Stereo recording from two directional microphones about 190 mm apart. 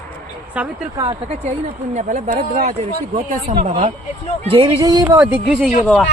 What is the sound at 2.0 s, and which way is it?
Speech, 35° right (ahead or behind).